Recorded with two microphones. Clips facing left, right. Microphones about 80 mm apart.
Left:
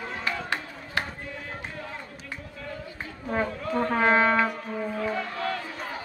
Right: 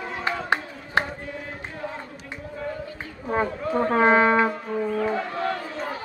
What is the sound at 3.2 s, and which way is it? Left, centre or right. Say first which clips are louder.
Foghorn: right 3 dB; right.